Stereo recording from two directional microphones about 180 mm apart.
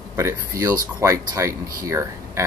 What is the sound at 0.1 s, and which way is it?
Speech, 15° right (ahead or behind).